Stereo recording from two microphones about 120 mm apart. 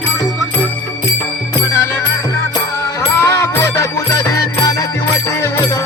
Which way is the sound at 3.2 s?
25° left (ahead or behind).